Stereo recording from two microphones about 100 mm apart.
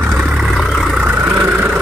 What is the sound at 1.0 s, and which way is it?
Vehicle, 20° right (ahead or behind).